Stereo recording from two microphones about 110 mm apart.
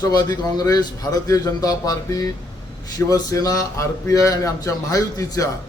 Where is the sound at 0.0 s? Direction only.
35° left (ahead or behind).